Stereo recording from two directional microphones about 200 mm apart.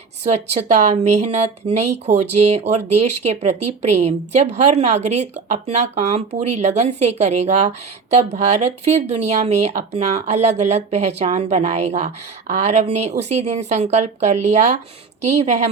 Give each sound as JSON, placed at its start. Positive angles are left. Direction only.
{"t": 0.3, "sound": "speech", "side_deg": -35}